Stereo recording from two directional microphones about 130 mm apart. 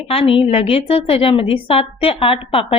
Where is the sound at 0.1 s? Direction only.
45° left (ahead or behind).